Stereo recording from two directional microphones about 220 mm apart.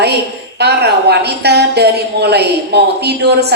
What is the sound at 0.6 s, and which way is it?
A woman's voice, 50° right (ahead or behind).